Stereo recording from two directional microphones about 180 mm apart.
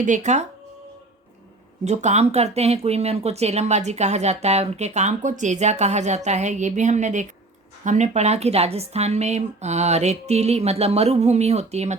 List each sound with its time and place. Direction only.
0.0 s speech: 45° right (ahead or behind)
1.8 s speech: 40° right (ahead or behind)